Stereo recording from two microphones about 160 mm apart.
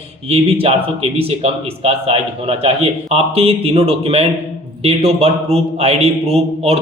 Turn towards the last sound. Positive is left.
turn(degrees=-40)  # may be behind; listen again after turning